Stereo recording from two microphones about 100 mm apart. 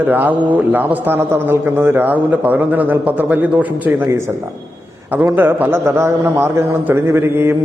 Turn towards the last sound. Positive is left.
turn(degrees=-25)  # may be behind; listen again after turning